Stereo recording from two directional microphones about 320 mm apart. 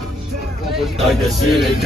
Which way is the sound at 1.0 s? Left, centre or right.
Centre.